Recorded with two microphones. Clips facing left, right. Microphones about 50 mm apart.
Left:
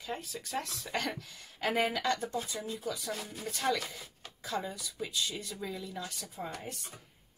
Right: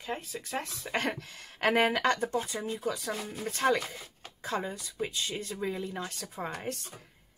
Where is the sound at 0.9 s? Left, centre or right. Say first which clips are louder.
Right 4 dB; right.